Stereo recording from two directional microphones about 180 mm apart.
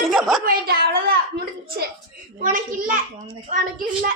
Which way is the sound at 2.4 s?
50° right (ahead or behind).